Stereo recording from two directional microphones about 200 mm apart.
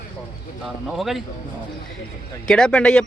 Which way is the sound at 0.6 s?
Centre (ahead or behind).